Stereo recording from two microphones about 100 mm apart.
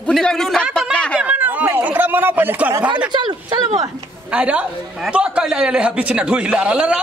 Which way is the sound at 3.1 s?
50° right (ahead or behind).